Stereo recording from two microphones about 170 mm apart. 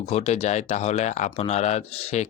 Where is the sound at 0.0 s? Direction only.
40° left (ahead or behind).